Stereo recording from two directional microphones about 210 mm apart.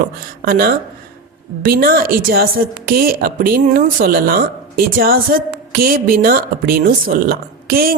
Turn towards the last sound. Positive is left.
turn(degrees=-45)  # may be behind; listen again after turning